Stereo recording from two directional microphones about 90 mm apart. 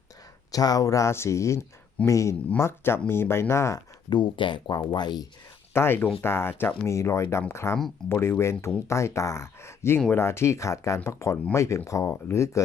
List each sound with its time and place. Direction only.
0.5 s speech: 45° left (ahead or behind)
4.1 s speech: 65° left (ahead or behind)
5.7 s speech: 25° left (ahead or behind)